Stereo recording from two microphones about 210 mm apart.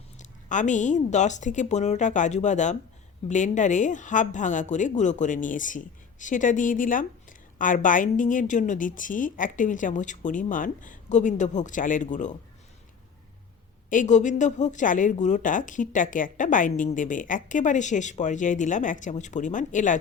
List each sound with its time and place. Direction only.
0.2 s speech: 35° left (ahead or behind)
13.9 s speech: 35° left (ahead or behind)